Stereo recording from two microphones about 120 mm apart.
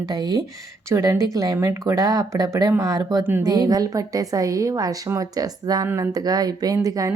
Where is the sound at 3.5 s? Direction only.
30° right (ahead or behind).